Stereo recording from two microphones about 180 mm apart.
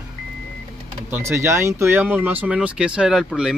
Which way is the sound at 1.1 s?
15° right (ahead or behind).